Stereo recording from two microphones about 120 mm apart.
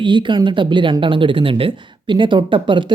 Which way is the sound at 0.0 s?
40° right (ahead or behind).